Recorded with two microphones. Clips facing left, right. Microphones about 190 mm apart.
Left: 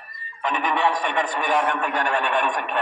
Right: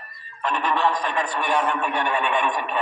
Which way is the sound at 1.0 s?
70° left (ahead or behind).